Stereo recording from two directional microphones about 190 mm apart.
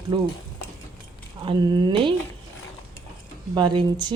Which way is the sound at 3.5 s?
25° right (ahead or behind).